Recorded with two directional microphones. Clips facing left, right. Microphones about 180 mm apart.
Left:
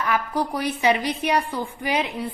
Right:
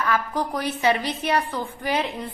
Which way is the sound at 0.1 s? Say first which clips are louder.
Left 3 dB; 10° left (ahead or behind).